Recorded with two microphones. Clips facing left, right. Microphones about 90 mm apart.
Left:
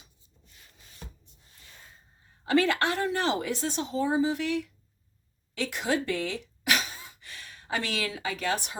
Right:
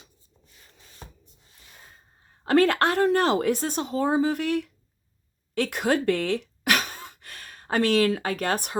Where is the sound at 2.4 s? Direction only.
50° right (ahead or behind).